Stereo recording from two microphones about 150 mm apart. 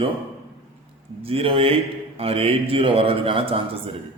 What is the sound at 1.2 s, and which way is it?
A man's voice, 40° right (ahead or behind).